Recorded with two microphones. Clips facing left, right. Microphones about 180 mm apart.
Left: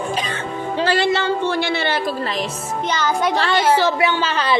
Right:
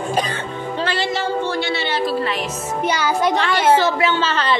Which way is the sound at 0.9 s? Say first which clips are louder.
Left 4 dB; 60° left (ahead or behind).